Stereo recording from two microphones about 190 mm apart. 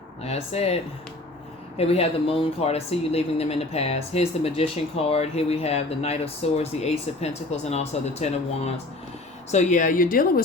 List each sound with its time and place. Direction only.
0.2 s speech: 35° left (ahead or behind)
1.8 s speech: 30° left (ahead or behind); by 10.4 s 45° left (ahead or behind)